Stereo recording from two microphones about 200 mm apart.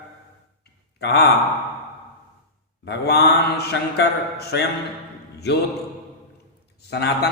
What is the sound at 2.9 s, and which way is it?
Speech, 55° left (ahead or behind).